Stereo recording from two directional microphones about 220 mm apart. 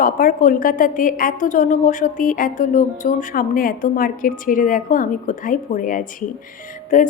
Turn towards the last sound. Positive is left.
turn(degrees=35)  # may be behind; listen again after turning